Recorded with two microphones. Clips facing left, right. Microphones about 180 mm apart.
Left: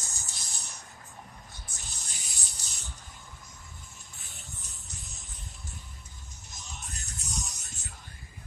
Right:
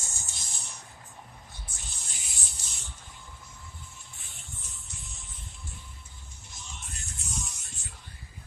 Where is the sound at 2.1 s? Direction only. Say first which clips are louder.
Even; 40° left (ahead or behind).